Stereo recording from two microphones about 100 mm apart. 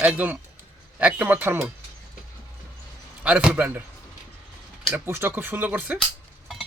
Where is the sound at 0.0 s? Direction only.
20° right (ahead or behind).